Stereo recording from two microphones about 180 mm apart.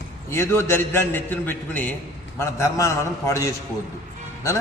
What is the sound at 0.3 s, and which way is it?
A man's voice, 15° left (ahead or behind).